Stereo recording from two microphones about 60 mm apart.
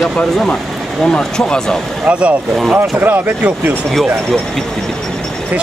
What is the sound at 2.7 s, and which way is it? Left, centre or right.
Speech, right.